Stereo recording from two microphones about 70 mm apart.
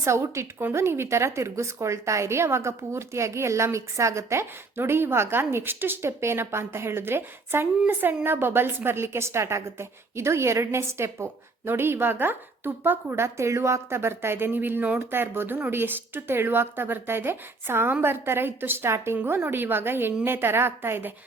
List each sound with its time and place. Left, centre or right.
0.0 s speech: right